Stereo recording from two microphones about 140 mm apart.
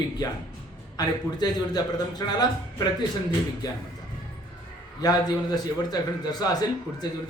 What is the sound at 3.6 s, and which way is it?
Speech, 30° left (ahead or behind).